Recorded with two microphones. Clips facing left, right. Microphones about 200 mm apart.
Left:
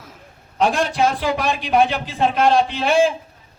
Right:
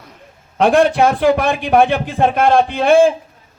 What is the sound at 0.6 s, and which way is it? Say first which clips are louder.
A man's voice: right 6 dB; 60° right (ahead or behind).